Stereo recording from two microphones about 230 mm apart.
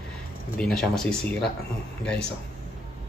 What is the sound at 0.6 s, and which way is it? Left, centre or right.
Speech, centre.